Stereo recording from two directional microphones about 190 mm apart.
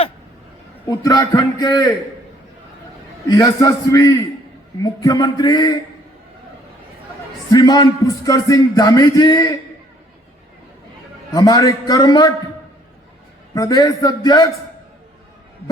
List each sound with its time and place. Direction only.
0.9 s a man's voice: 20° left (ahead or behind)
3.2 s a man's voice: 20° left (ahead or behind)
7.5 s a man's voice: 20° left (ahead or behind)
11.3 s a man's voice: 20° left (ahead or behind)
13.5 s a man's voice: 20° left (ahead or behind)